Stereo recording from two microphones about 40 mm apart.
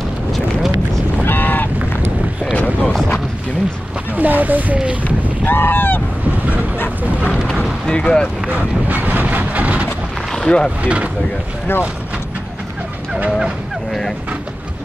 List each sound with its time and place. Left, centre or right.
1.2 s goose: left
2.5 s a sound: left
4.2 s speech: right
5.5 s honk: left
7.8 s speech: centre
8.5 s speech: right
10.5 s speech: left
10.8 s speech: right